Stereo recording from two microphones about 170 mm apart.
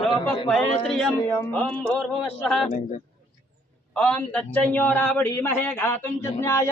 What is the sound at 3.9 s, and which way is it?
Speech, 5° left (ahead or behind).